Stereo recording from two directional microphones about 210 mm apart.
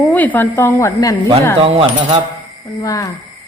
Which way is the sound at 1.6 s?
25° right (ahead or behind).